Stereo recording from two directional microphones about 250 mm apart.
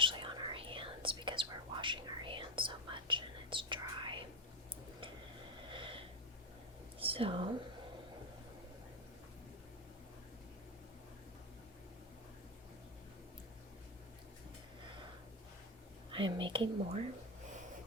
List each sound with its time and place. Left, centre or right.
0.0 s whispering: centre
5.5 s wheeze: centre
7.0 s whispering: right
16.1 s speech: centre